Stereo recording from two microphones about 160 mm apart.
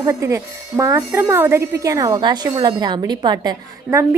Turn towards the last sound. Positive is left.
turn(degrees=-20)  # may be behind; listen again after turning